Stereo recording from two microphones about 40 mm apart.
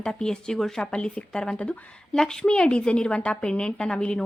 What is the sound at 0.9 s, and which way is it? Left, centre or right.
A woman's voice, left.